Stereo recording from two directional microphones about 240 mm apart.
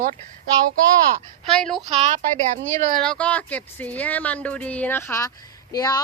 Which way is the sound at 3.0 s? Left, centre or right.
Centre.